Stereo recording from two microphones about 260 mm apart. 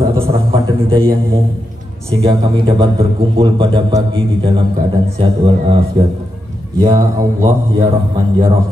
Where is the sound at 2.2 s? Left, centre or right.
Centre.